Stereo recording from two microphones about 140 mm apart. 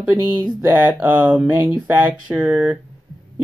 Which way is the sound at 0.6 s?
15° right (ahead or behind).